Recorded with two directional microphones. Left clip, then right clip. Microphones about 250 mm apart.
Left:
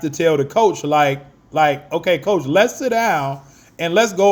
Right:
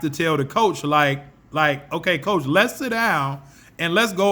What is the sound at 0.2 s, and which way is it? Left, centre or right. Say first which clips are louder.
A man's voice: left 5 dB; centre.